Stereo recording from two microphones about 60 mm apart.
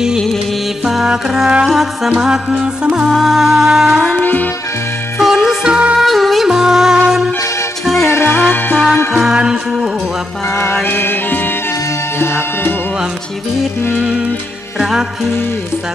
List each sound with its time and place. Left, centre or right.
0.8 s music: centre
3.1 s music: centre
4.2 s music: left
5.2 s music: centre
5.9 s music: centre
7.8 s music: centre
8.1 s music: left
8.4 s music: left
9.1 s music: centre
10.5 s music: left
13.9 s music: centre